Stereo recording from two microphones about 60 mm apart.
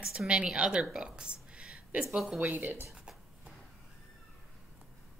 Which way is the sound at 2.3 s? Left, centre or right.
Right.